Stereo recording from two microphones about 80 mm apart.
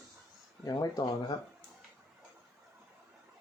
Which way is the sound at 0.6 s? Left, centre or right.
Left.